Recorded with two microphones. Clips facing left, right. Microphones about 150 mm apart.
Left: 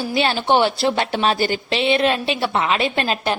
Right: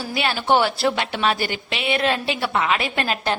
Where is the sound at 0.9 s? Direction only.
35° left (ahead or behind).